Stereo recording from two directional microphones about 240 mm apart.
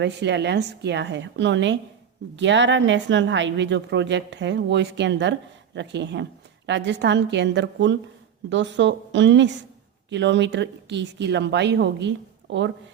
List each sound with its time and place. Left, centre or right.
0.0 s a woman's voice: right